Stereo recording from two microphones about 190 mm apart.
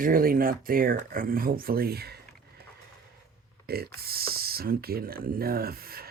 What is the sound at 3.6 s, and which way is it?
Speech, 55° right (ahead or behind).